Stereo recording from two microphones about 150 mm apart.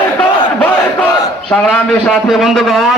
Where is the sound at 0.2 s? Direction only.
10° left (ahead or behind).